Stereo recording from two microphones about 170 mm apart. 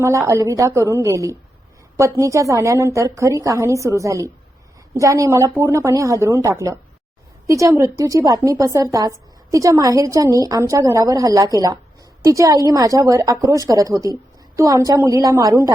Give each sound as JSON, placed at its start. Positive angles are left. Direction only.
{"t": 0.0, "sound": "a woman's voice", "side_deg": -15}